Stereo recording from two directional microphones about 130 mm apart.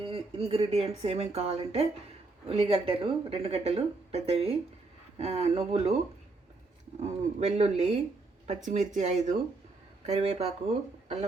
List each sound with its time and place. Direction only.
0.0 s speech: 50° right (ahead or behind)
7.0 s speech: 60° right (ahead or behind)